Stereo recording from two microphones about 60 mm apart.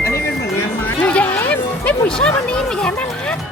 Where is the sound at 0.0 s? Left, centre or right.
Left.